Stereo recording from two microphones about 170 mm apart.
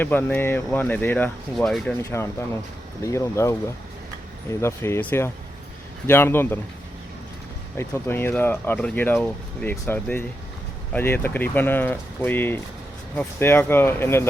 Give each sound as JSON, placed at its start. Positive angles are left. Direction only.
{"t": 0.0, "sound": "speech", "side_deg": 10}
{"t": 2.0, "sound": "speech", "side_deg": 15}
{"t": 7.8, "sound": "speech", "side_deg": 15}